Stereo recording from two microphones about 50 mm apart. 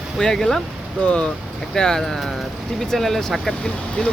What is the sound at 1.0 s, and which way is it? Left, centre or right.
Speech, left.